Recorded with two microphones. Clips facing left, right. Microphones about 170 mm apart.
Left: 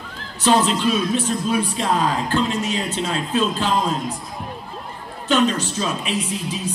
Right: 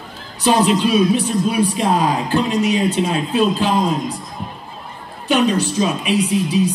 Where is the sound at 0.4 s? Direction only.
15° right (ahead or behind).